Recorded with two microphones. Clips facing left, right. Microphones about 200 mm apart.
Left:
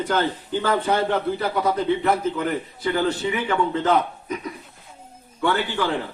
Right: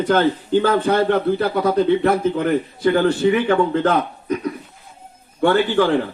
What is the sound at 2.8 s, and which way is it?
A man's voice, 60° right (ahead or behind).